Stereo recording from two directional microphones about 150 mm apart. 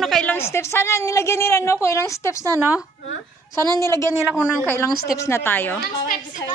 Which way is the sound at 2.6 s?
10° right (ahead or behind).